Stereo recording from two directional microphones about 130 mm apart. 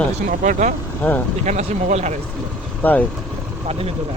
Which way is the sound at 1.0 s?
10° left (ahead or behind).